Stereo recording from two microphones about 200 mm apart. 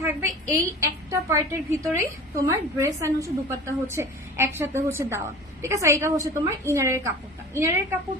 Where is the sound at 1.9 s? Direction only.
15° right (ahead or behind).